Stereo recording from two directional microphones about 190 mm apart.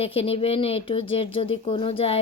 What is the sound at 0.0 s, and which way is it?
Speech, 30° left (ahead or behind).